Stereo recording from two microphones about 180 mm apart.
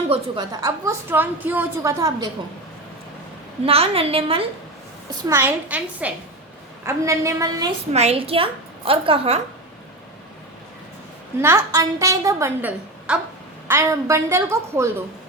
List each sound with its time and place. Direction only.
0.1 s a woman's voice: 25° right (ahead or behind)
3.6 s a woman's voice: 35° right (ahead or behind)
5.3 s a woman's voice: 10° right (ahead or behind)
7.9 s a woman's voice: 35° right (ahead or behind)
11.3 s a woman's voice: 15° right (ahead or behind)